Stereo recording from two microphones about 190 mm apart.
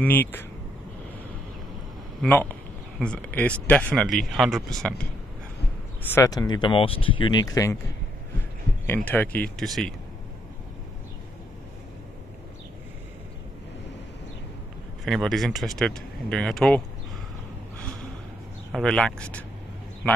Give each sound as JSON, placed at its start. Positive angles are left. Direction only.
{"t": 0.0, "sound": "speech", "side_deg": 10}
{"t": 2.2, "sound": "speech", "side_deg": 5}
{"t": 6.0, "sound": "speech", "side_deg": 15}
{"t": 8.8, "sound": "speech", "side_deg": 10}
{"t": 15.0, "sound": "speech", "side_deg": 0}
{"t": 18.7, "sound": "speech", "side_deg": 0}